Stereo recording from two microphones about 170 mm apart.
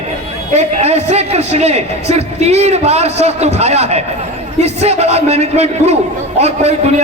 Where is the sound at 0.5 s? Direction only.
40° right (ahead or behind).